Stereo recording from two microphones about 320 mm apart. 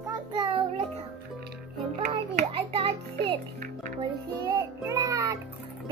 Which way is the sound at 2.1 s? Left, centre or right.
Centre.